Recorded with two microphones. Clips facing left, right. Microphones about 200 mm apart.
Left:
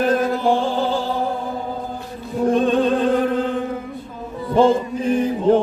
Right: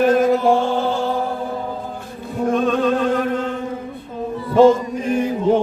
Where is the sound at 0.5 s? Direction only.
35° left (ahead or behind).